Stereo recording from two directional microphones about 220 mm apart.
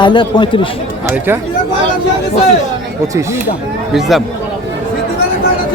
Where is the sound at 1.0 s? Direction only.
10° right (ahead or behind).